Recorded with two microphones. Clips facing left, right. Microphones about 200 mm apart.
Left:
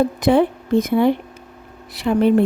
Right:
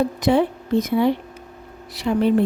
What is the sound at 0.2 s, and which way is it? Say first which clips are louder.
A woman's voice: left 3 dB; 55° left (ahead or behind).